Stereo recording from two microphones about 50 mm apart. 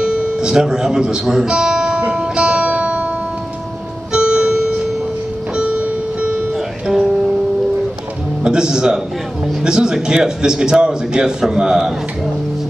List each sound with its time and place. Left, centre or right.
0.0 s guitar: centre
4.1 s music: centre
8.5 s a man's voice: centre